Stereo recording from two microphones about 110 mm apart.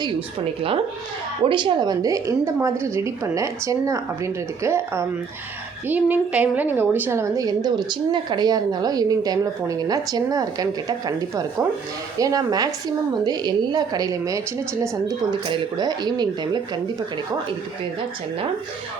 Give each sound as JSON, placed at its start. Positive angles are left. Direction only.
{"t": 1.5, "sound": "a woman's voice", "side_deg": -45}
{"t": 5.9, "sound": "a woman's voice", "side_deg": -15}
{"t": 15.0, "sound": "a woman's voice", "side_deg": -45}